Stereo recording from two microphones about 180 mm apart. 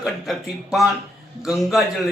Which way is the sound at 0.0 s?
Centre (ahead or behind).